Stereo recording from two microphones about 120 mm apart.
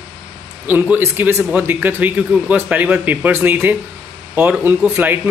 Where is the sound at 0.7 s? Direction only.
15° right (ahead or behind).